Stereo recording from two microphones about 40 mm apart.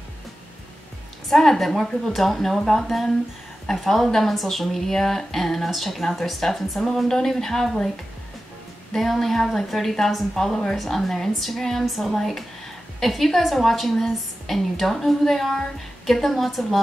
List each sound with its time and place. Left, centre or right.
1.3 s a woman's voice: centre
8.9 s a woman's voice: centre